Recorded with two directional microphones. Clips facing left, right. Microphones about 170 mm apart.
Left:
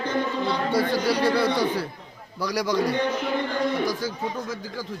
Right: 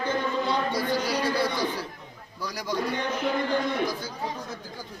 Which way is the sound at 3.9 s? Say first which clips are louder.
Left 4 dB; 90° left.